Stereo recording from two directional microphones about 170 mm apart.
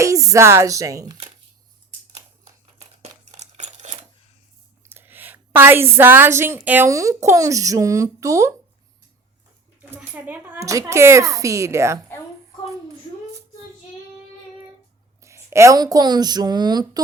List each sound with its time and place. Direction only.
0.0 s a woman's voice: 20° right (ahead or behind)
3.0 s a sound: 40° right (ahead or behind)
4.8 s a woman's voice: 10° right (ahead or behind)
9.9 s speech: 10° right (ahead or behind)
15.2 s speech: 15° right (ahead or behind)